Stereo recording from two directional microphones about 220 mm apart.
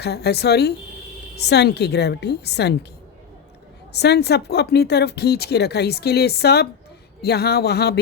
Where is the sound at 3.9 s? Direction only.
50° left (ahead or behind).